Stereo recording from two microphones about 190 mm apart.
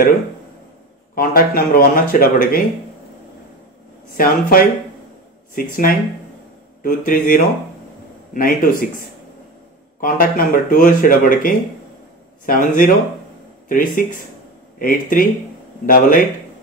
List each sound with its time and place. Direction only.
1.1 s speech: 50° left (ahead or behind)
4.2 s speech: 50° left (ahead or behind)
9.9 s speech: 50° left (ahead or behind)